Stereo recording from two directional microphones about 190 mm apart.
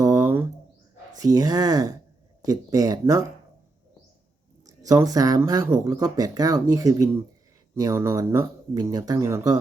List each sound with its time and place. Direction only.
0.0 s a sound: 20° right (ahead or behind)
1.2 s speech: 20° right (ahead or behind)
4.6 s speech: 20° right (ahead or behind)